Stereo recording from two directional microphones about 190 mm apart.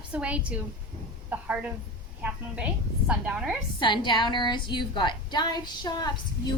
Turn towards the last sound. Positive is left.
turn(degrees=20)  # may be behind; listen again after turning